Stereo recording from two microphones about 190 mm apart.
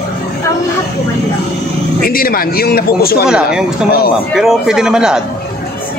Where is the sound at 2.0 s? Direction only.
50° left (ahead or behind).